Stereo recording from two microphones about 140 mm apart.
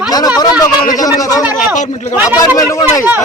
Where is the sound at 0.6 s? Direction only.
25° left (ahead or behind).